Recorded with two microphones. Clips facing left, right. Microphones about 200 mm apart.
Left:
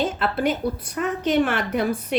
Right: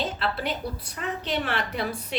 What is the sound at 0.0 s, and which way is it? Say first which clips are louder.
A woman's voice: left 6 dB; 50° left (ahead or behind).